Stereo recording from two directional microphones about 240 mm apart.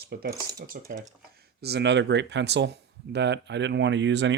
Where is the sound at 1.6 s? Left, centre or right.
Right.